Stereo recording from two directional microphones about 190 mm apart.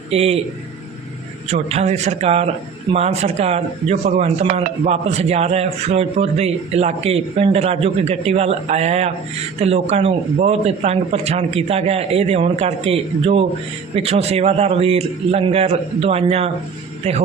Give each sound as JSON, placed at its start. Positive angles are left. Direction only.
{"t": 0.1, "sound": "speech", "side_deg": -35}
{"t": 1.5, "sound": "speech", "side_deg": -35}